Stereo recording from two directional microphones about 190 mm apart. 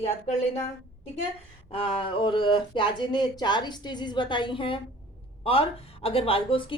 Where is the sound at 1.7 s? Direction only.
30° left (ahead or behind).